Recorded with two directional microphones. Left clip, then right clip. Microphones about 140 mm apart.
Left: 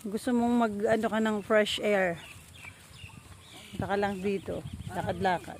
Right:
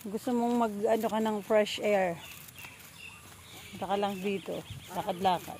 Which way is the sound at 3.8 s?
40° left (ahead or behind).